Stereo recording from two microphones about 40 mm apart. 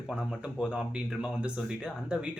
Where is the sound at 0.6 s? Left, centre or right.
Right.